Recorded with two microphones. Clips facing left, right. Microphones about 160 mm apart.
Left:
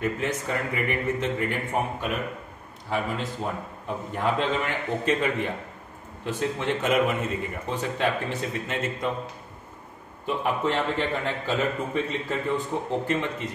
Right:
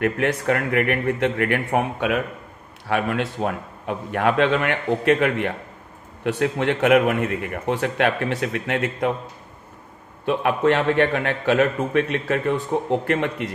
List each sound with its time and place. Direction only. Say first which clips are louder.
0.0 s a man's voice: right 6 dB; 65° right (ahead or behind)
10.2 s a man's voice: right 7 dB; 70° right (ahead or behind)